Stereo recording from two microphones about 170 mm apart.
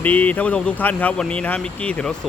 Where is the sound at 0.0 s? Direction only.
10° left (ahead or behind).